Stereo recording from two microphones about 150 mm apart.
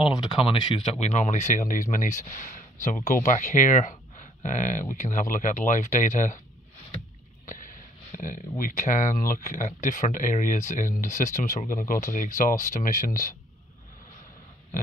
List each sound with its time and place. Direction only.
0.1 s speech: 35° left (ahead or behind); by 6.4 s 60° left (ahead or behind)
7.4 s a sound: 60° left (ahead or behind)
8.2 s speech: 60° left (ahead or behind)